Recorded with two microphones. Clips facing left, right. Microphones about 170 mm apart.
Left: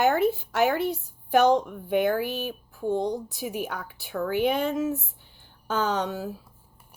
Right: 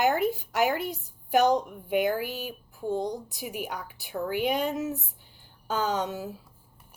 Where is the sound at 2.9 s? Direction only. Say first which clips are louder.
Left 3 dB; 65° left (ahead or behind).